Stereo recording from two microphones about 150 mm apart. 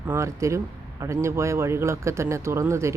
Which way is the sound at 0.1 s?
20° right (ahead or behind).